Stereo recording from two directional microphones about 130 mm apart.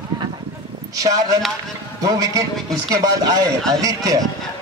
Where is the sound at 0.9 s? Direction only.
25° right (ahead or behind).